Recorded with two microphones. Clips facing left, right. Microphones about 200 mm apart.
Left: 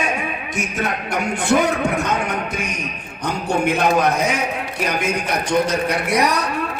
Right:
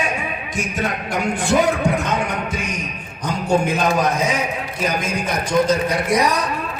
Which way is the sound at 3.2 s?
65° left (ahead or behind).